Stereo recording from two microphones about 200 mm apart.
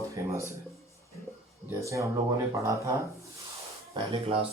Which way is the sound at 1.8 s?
15° right (ahead or behind).